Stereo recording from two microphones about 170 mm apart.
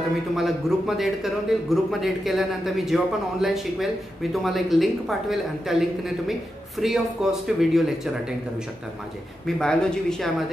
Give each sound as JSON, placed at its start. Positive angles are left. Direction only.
{"t": 0.4, "sound": "a man's voice", "side_deg": 0}
{"t": 9.6, "sound": "a man's voice", "side_deg": 5}